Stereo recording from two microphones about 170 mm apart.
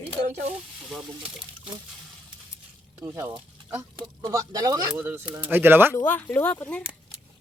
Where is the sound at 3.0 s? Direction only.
15° right (ahead or behind).